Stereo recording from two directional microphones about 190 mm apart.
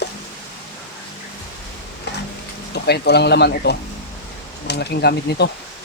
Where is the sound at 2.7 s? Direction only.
60° left (ahead or behind).